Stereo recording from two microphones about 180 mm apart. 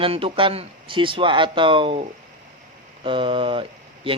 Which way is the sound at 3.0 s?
30° right (ahead or behind).